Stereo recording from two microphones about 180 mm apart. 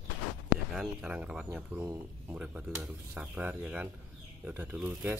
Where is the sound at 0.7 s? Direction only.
5° right (ahead or behind).